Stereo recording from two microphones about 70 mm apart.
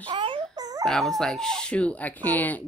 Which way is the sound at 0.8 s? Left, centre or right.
Centre.